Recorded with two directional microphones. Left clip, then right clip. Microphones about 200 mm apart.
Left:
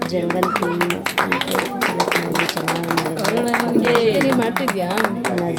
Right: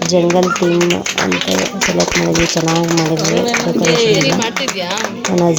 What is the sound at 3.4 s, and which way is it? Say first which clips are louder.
Speech: right 4 dB; 40° right (ahead or behind).